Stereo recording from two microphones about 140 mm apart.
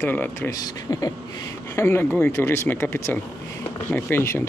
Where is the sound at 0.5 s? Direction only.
25° left (ahead or behind).